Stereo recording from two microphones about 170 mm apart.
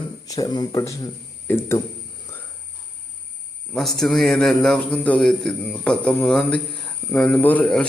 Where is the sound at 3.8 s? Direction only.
Centre (ahead or behind).